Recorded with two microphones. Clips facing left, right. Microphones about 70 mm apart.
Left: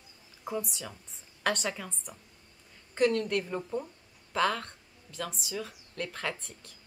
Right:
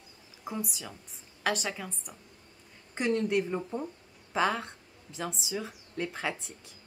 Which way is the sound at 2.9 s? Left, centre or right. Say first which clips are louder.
Left 1 dB; centre.